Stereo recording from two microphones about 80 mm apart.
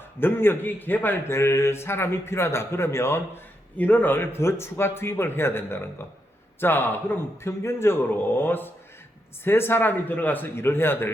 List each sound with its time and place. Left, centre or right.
0.2 s a man's voice: left